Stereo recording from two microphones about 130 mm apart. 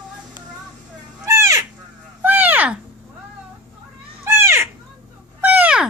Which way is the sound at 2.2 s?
15° right (ahead or behind).